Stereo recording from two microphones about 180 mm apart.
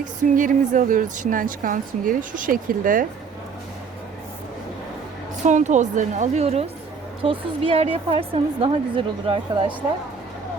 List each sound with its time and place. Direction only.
0.0 s a woman's voice: 45° right (ahead or behind)
5.5 s a woman's voice: 40° right (ahead or behind)